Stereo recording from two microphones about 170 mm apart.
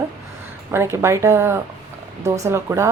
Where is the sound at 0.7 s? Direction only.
15° right (ahead or behind).